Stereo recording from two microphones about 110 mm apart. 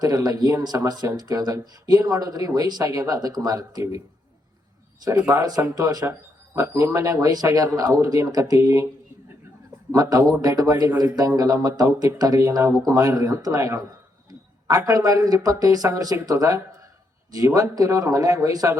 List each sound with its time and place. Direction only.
0.0 s speech: 40° right (ahead or behind)
5.0 s speech: 35° right (ahead or behind)
9.9 s speech: 35° right (ahead or behind)